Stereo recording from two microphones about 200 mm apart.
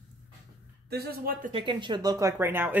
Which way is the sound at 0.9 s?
50° right (ahead or behind).